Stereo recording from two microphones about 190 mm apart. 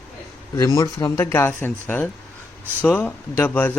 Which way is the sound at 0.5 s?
15° left (ahead or behind).